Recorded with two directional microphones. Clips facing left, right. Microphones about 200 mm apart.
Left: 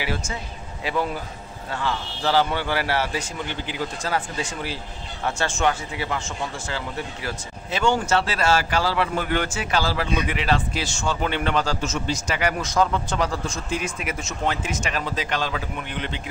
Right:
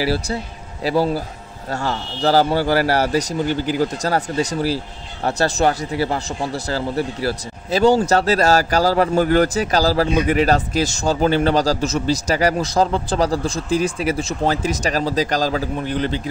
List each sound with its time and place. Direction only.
0.0 s speech: 35° right (ahead or behind)